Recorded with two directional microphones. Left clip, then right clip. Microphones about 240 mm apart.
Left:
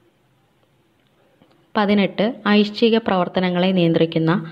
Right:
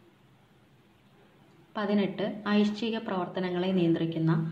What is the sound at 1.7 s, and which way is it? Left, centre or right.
A woman's voice, left.